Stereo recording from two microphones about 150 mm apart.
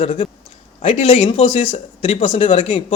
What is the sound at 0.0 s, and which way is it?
A man's voice, 40° left (ahead or behind).